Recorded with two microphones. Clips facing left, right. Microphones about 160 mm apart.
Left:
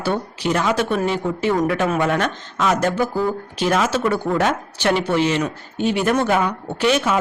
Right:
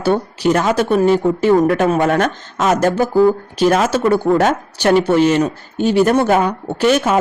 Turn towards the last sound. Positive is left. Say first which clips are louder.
# right 4 dB
turn(degrees=-45)  # may be behind; listen again after turning